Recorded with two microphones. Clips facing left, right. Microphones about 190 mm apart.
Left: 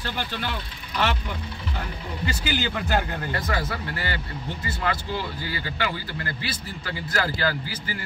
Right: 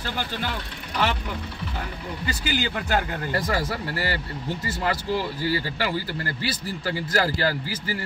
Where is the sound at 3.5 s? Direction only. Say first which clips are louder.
Right 2 dB; 35° right (ahead or behind).